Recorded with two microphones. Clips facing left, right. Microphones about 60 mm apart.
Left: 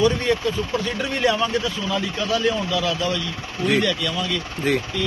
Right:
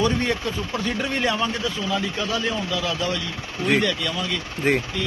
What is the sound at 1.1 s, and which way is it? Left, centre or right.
Speech, centre.